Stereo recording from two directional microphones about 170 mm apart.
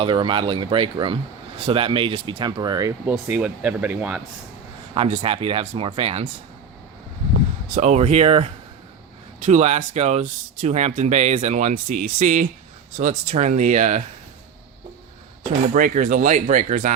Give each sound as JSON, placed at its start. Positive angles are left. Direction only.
{"t": 0.0, "sound": "speech", "side_deg": -30}
{"t": 3.1, "sound": "speech", "side_deg": -10}
{"t": 4.9, "sound": "speech", "side_deg": -40}
{"t": 7.7, "sound": "speech", "side_deg": -45}
{"t": 15.7, "sound": "speech", "side_deg": -50}